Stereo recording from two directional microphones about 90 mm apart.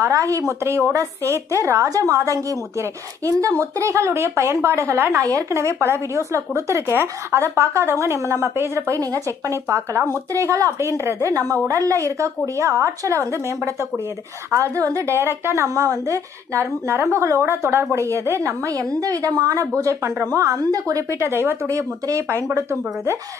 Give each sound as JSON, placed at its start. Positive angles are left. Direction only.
{"t": 0.0, "sound": "a woman's voice", "side_deg": -35}